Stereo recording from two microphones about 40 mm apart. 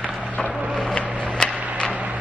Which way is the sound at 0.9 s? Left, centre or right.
Left.